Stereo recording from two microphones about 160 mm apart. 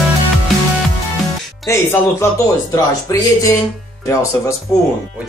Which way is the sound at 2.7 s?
20° left (ahead or behind).